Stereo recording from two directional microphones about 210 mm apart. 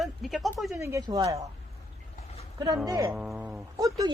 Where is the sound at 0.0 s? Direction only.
Centre (ahead or behind).